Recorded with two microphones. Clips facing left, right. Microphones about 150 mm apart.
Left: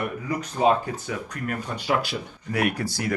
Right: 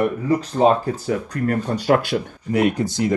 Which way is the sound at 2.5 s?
20° right (ahead or behind).